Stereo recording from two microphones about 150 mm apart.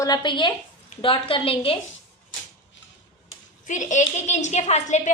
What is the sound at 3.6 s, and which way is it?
A woman's voice, 55° left (ahead or behind).